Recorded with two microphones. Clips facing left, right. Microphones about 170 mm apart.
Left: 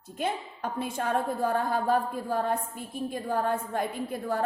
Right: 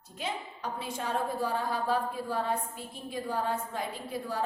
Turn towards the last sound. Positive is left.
turn(degrees=55)  # may be behind; listen again after turning